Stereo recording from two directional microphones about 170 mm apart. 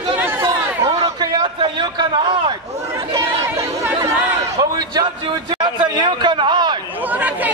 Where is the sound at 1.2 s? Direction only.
25° right (ahead or behind).